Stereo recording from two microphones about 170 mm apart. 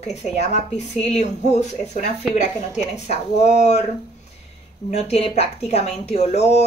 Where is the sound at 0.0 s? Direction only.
40° left (ahead or behind).